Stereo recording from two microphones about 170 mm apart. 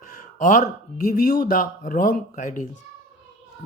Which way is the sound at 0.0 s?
50° left (ahead or behind).